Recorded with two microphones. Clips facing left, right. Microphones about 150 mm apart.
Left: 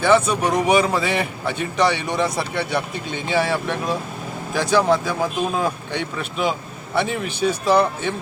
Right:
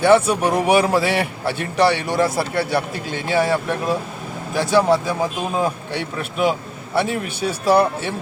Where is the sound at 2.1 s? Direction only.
5° right (ahead or behind).